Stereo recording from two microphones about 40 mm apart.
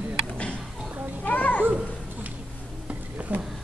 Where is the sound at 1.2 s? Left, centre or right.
Left.